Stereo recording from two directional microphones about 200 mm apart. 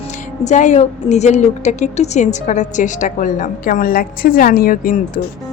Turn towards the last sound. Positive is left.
turn(degrees=45)  # may be behind; listen again after turning